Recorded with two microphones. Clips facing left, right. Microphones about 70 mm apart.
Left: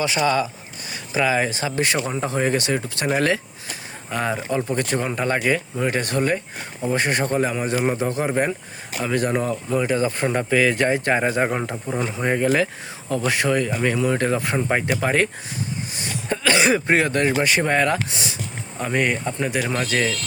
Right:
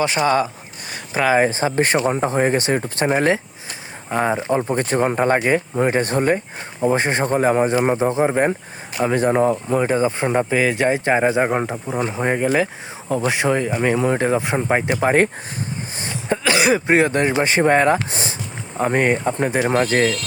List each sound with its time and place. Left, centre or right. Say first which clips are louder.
0.3 s speech: right 3 dB; right
9.6 s speech: right 3 dB; right
9.9 s speech: right 3 dB; right
16.0 s a sound: right 4 dB; right
16.4 s speech: right 1 dB; centre
16.8 s speech: right 3 dB; centre